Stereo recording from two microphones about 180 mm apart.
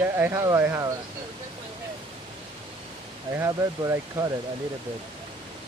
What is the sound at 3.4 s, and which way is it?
Speech, 15° right (ahead or behind).